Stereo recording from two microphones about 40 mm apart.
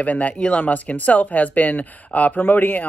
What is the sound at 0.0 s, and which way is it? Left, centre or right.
Speech, left.